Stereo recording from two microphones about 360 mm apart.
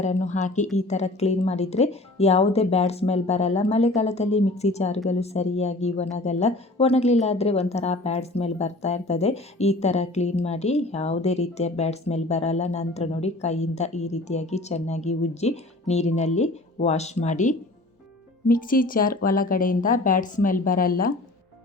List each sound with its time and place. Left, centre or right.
0.0 s a woman's voice: centre